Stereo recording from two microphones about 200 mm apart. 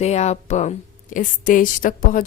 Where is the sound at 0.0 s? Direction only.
35° left (ahead or behind).